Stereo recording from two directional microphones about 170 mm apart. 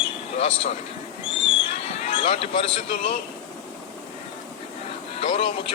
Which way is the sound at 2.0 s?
45° left (ahead or behind).